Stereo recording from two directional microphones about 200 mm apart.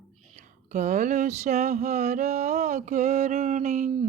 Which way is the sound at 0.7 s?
35° right (ahead or behind).